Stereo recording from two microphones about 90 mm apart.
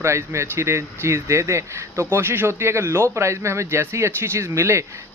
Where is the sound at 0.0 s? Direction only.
30° right (ahead or behind).